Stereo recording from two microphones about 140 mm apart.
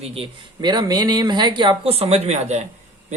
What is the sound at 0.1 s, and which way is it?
Speech, 35° right (ahead or behind).